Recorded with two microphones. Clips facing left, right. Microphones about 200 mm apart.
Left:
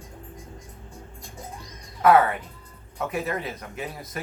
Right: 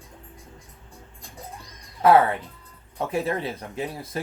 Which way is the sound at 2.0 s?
30° right (ahead or behind).